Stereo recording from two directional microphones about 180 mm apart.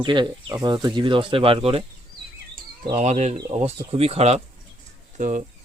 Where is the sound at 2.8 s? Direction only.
35° right (ahead or behind).